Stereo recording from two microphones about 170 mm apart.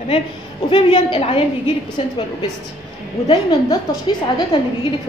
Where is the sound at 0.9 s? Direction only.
35° left (ahead or behind).